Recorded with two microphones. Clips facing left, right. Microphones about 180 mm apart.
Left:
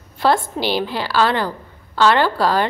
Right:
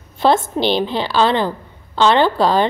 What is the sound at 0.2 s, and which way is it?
A woman's voice, 20° right (ahead or behind).